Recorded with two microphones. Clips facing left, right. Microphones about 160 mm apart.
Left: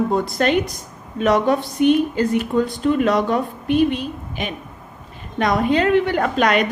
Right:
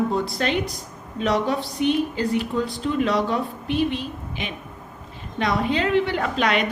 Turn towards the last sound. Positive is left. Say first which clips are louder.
# left 5 dB
turn(degrees=45)  # may be behind; listen again after turning